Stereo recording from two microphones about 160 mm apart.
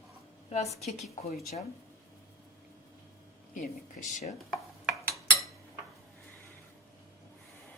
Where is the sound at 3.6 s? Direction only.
50° left (ahead or behind).